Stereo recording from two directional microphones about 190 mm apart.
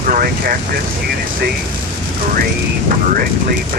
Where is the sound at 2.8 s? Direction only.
50° right (ahead or behind).